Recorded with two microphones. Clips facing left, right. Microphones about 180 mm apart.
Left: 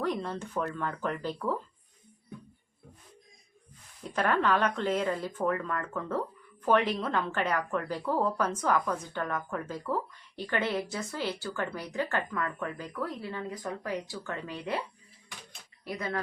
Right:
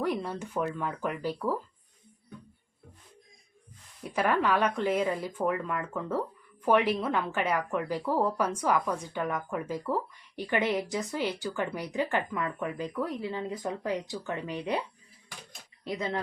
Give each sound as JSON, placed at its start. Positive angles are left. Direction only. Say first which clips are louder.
{"t": 0.0, "sound": "a woman's voice", "louder": "right 1 dB", "side_deg": -10}
{"t": 4.0, "sound": "a woman's voice", "louder": "right 1 dB", "side_deg": -10}
{"t": 15.8, "sound": "speech", "louder": "right 2 dB", "side_deg": -20}